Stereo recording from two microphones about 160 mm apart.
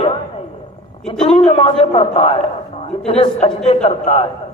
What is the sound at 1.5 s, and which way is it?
Speech, 40° left (ahead or behind).